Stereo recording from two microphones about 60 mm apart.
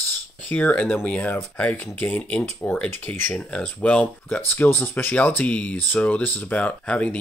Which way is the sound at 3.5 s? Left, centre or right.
Centre.